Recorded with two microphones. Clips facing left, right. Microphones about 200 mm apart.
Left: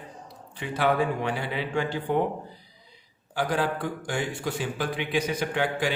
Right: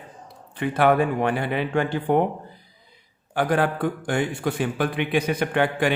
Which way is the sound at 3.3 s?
55° right (ahead or behind).